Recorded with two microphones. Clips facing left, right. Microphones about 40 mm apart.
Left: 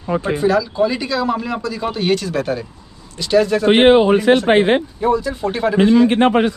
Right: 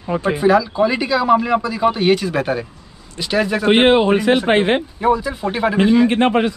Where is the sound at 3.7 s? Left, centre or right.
Right.